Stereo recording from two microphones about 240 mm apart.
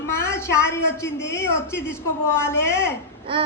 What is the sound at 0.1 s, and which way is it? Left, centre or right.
A woman's voice, centre.